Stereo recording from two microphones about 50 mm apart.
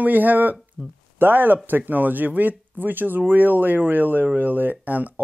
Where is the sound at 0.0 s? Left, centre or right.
Right.